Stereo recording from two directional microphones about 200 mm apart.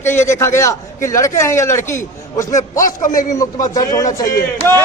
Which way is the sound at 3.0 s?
40° left (ahead or behind).